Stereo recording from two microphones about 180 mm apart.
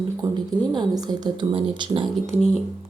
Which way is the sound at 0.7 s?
25° right (ahead or behind).